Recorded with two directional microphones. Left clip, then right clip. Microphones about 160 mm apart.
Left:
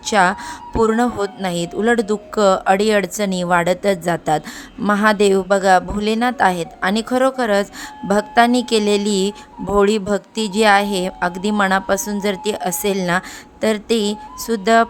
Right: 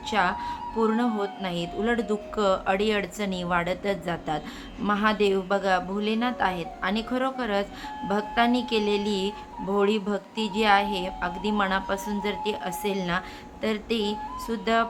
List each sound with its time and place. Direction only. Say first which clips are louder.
0.0 s speech: left 9 dB; 55° left (ahead or behind)